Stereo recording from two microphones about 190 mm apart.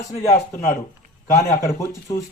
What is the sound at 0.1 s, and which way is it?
Speech, 15° left (ahead or behind).